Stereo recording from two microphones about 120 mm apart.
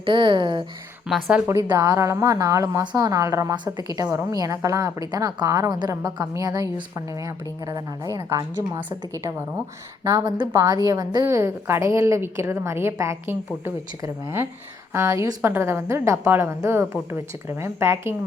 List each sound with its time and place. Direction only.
0.0 s speech: 40° right (ahead or behind)
1.0 s speech: 5° right (ahead or behind)
1.7 s a woman's voice: 25° right (ahead or behind)
17.6 s a woman's voice: 20° right (ahead or behind)